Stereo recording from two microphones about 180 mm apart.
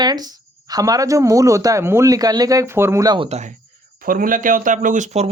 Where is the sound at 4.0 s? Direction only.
50° right (ahead or behind).